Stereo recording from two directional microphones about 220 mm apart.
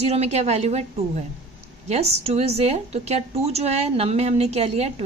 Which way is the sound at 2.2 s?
30° right (ahead or behind).